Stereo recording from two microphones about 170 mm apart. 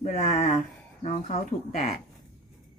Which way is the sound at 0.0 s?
45° left (ahead or behind).